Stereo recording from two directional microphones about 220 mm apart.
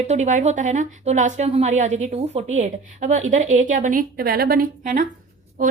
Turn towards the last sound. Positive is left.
turn(degrees=-40)  # may be behind; listen again after turning